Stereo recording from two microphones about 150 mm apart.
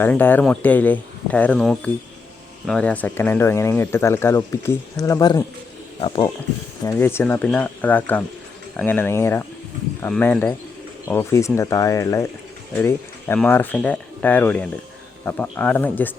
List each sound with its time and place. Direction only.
0.0 s speech: 10° left (ahead or behind)
6.0 s speech: 40° left (ahead or behind)
6.8 s speech: 15° left (ahead or behind)